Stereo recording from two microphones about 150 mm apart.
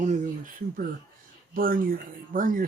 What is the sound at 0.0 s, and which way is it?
Speech, 55° right (ahead or behind).